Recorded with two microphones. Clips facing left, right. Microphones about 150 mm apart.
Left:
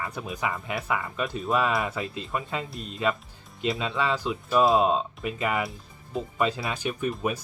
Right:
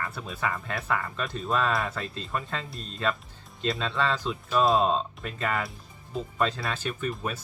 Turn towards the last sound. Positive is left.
turn(degrees=10)  # may be behind; listen again after turning